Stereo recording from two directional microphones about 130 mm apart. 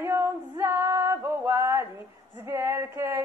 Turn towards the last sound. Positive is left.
turn(degrees=-20)  # may be behind; listen again after turning